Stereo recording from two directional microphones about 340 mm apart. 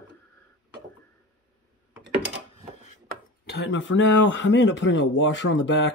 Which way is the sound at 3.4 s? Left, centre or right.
Left.